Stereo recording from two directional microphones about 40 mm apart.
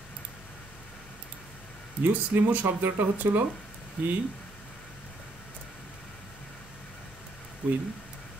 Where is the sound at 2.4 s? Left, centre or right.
Right.